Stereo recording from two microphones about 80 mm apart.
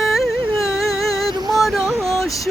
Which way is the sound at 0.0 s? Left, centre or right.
Centre.